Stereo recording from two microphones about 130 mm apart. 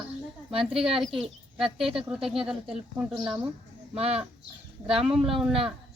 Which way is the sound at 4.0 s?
50° right (ahead or behind).